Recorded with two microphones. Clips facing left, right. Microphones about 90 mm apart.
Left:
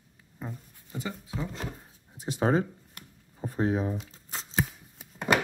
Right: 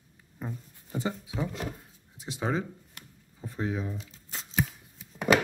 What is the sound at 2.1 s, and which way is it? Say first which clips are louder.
Speech: left 5 dB; 45° left (ahead or behind).